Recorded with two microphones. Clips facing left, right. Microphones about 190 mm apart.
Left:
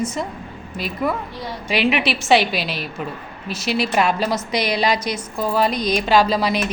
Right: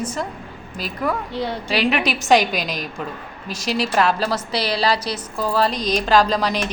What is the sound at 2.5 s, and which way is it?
A woman's voice, 40° right (ahead or behind).